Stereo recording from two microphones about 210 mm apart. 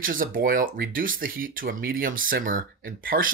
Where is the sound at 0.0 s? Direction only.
40° right (ahead or behind).